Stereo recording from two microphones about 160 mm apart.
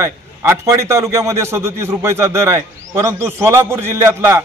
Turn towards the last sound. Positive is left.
turn(degrees=-15)  # may be behind; listen again after turning